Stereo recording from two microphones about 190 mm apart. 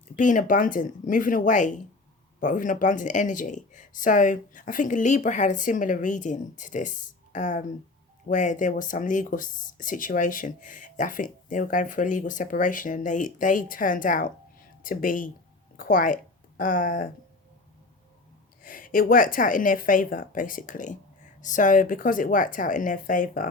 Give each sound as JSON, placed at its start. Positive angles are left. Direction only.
{"t": 0.2, "sound": "speech", "side_deg": 45}
{"t": 18.6, "sound": "speech", "side_deg": 45}